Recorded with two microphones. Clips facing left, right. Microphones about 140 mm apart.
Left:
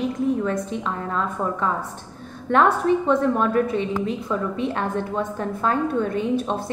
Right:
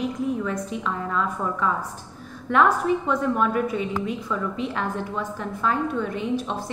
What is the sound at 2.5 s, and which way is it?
A woman's voice, 30° left (ahead or behind).